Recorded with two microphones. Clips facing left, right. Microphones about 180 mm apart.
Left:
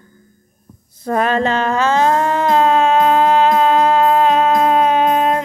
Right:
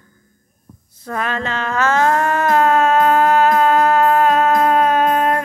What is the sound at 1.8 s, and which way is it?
Music, 15° left (ahead or behind).